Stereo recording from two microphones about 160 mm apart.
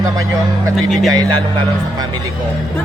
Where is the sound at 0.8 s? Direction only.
Centre (ahead or behind).